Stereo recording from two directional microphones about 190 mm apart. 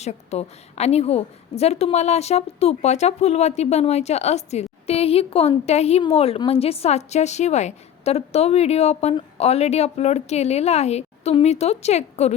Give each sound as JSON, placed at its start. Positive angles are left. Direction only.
{"t": 0.0, "sound": "a woman's voice", "side_deg": 35}